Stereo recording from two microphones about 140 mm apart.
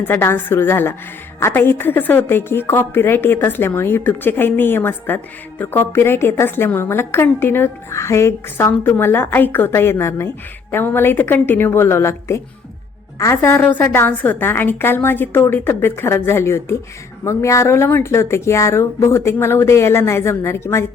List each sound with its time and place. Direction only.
0.0 s a woman's voice: 15° left (ahead or behind)